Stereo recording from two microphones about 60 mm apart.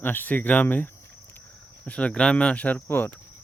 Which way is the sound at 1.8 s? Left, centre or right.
Centre.